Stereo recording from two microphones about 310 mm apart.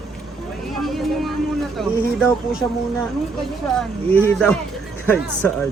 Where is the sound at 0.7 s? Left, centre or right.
Centre.